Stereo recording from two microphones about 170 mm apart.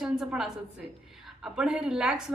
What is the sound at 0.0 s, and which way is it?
A woman's voice, 5° right (ahead or behind).